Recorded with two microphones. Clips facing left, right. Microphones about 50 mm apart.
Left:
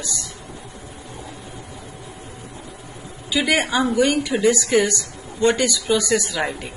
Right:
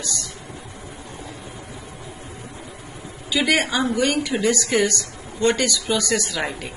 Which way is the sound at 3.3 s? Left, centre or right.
Centre.